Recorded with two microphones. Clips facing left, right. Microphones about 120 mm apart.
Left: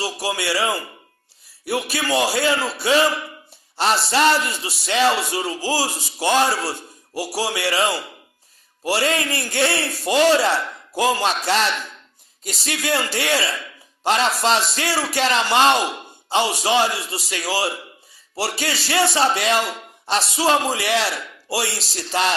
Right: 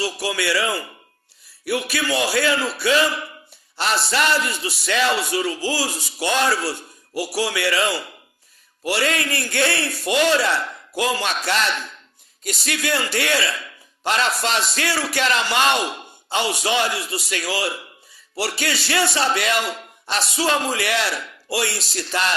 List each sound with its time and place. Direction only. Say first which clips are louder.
0.0 s a man's voice: right 1 dB; 30° left (ahead or behind)